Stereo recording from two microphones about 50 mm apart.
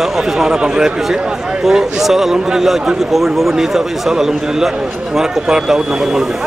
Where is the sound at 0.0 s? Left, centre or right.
Centre.